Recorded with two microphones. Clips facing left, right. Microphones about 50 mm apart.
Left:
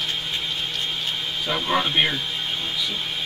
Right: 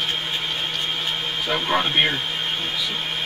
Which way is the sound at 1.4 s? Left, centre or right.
Centre.